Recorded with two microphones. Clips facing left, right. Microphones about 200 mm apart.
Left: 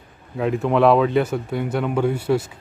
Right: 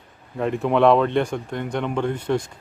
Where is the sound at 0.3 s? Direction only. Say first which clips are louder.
Left 1 dB; centre (ahead or behind).